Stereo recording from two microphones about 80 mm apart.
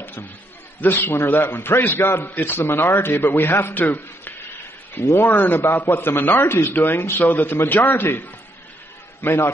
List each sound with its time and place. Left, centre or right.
0.7 s a man's voice: left